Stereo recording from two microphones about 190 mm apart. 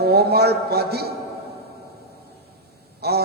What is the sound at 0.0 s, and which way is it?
A man's voice, 55° right (ahead or behind).